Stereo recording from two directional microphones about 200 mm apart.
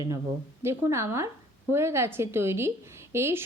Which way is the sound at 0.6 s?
15° right (ahead or behind).